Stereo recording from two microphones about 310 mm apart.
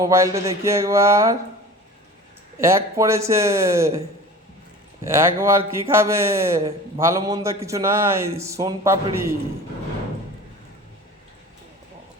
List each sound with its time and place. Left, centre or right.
0.0 s speech: centre
2.6 s speech: centre
5.0 s speech: centre